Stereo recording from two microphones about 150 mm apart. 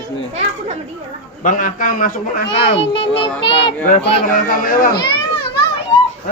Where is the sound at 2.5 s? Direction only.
35° left (ahead or behind).